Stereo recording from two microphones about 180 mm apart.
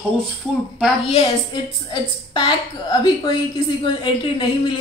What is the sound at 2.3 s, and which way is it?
A woman's voice, 25° left (ahead or behind).